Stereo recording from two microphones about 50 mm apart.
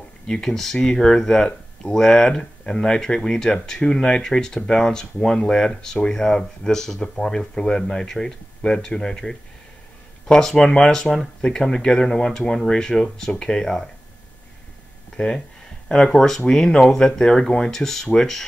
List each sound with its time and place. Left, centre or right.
0.3 s speech: centre
15.1 s speech: centre